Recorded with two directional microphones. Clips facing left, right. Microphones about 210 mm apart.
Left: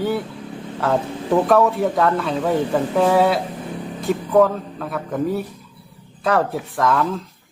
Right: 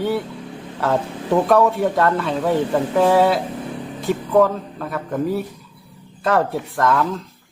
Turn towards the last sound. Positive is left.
turn(degrees=0)  # may be behind; listen again after turning